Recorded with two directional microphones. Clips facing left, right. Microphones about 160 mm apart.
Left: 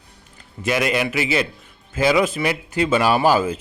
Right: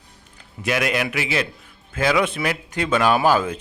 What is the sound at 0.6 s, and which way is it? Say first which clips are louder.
Speech: left 2 dB; centre (ahead or behind).